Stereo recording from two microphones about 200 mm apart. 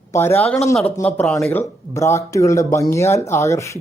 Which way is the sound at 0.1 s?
10° left (ahead or behind).